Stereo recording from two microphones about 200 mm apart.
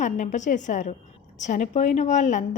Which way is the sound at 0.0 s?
40° left (ahead or behind).